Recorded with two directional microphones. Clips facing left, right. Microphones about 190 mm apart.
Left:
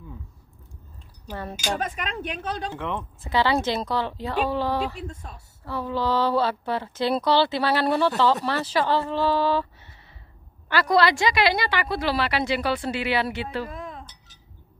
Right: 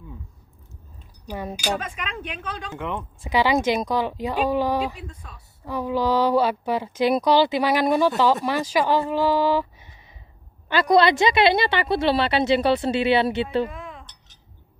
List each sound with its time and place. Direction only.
1.3 s speech: 10° right (ahead or behind)
1.8 s speech: 45° left (ahead or behind)
2.7 s speech: centre (ahead or behind)
3.3 s speech: 15° right (ahead or behind)
5.0 s a woman's voice: 45° left (ahead or behind)
5.7 s speech: 15° right (ahead or behind)
13.7 s chink: 40° left (ahead or behind)